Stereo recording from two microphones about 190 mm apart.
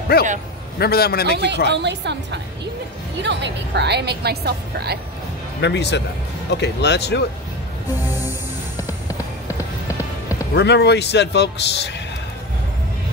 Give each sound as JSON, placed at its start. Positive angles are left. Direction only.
{"t": 0.1, "sound": "a man's voice", "side_deg": 50}
{"t": 1.7, "sound": "a woman's voice", "side_deg": -65}
{"t": 5.6, "sound": "a man's voice", "side_deg": 65}
{"t": 10.5, "sound": "a man's voice", "side_deg": 65}